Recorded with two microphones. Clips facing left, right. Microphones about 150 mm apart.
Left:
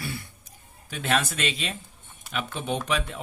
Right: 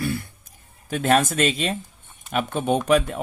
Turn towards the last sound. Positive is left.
turn(degrees=-45)  # may be behind; listen again after turning